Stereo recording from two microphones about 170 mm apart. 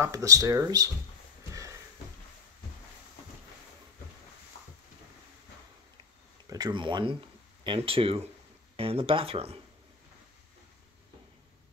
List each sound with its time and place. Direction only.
0.0 s speech: 20° right (ahead or behind)
6.5 s speech: 25° right (ahead or behind)